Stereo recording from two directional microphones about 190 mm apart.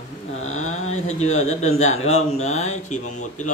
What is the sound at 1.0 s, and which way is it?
Speech, 35° left (ahead or behind).